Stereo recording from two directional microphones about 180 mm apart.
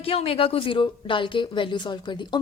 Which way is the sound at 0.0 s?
30° left (ahead or behind).